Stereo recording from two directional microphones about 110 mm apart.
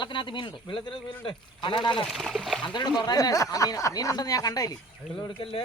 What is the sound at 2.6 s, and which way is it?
A woman's voice, 40° left (ahead or behind).